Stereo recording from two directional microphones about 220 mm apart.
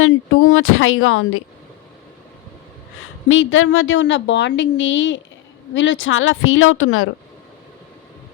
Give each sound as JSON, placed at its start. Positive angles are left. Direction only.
{"t": 0.0, "sound": "speech", "side_deg": 70}
{"t": 3.2, "sound": "a woman's voice", "side_deg": 65}